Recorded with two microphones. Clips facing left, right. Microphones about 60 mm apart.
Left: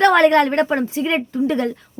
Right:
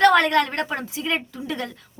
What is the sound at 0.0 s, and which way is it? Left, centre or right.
A woman's voice, left.